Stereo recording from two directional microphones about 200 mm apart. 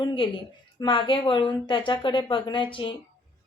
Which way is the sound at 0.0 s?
25° left (ahead or behind).